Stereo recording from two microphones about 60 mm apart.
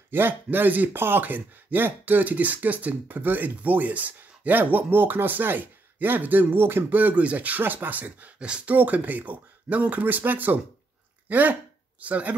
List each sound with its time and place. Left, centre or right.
0.1 s speech: right
8.4 s speech: centre
8.7 s speech: right